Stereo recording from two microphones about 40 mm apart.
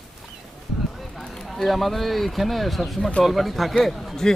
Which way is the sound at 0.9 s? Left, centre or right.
Centre.